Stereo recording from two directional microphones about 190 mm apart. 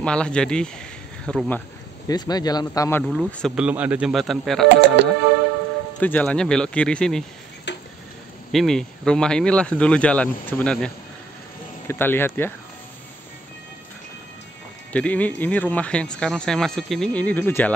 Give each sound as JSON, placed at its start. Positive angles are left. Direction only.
{"t": 0.0, "sound": "speech", "side_deg": 5}
{"t": 2.0, "sound": "speech", "side_deg": 20}
{"t": 3.0, "sound": "speech", "side_deg": 0}
{"t": 5.0, "sound": "music", "side_deg": -65}
{"t": 5.9, "sound": "speech", "side_deg": 5}
{"t": 7.7, "sound": "tick-tock", "side_deg": 65}
{"t": 8.5, "sound": "speech", "side_deg": 0}
{"t": 11.9, "sound": "speech", "side_deg": 10}
{"t": 14.9, "sound": "speech", "side_deg": 5}